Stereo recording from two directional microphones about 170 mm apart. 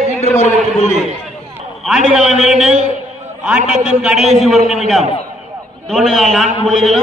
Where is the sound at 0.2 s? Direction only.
40° left (ahead or behind).